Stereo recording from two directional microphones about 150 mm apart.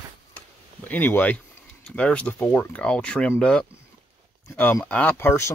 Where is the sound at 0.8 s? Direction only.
10° left (ahead or behind).